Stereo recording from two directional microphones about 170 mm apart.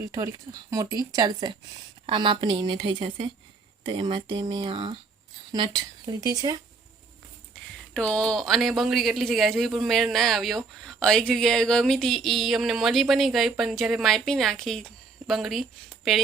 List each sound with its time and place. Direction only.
0.1 s speech: 20° right (ahead or behind)
7.9 s speech: 5° left (ahead or behind)